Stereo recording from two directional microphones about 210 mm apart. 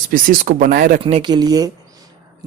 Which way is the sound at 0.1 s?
40° right (ahead or behind).